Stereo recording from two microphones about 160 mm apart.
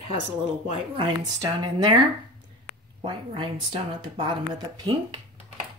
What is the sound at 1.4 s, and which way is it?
Speech, 25° right (ahead or behind).